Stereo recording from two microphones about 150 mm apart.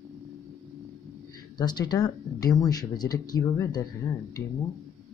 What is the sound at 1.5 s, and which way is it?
Speech, 30° left (ahead or behind).